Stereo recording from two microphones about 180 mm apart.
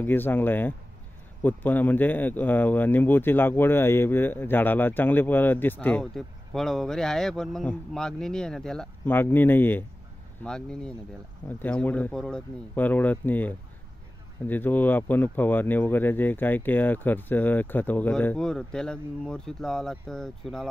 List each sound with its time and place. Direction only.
0.0 s speech: 10° left (ahead or behind)